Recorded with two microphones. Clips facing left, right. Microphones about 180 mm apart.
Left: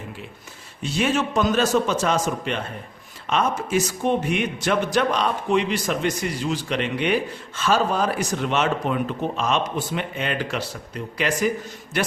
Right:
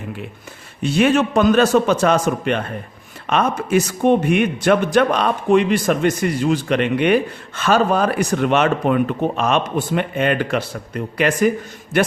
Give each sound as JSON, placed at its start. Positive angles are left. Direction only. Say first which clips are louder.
{"t": 0.8, "sound": "a man's voice", "louder": "right 7 dB", "side_deg": -60}